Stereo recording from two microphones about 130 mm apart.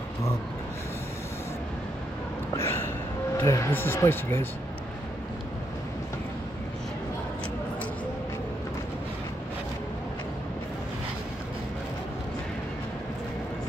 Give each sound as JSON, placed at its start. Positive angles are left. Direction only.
{"t": 2.5, "sound": "gasp", "side_deg": 20}
{"t": 3.3, "sound": "speech", "side_deg": 25}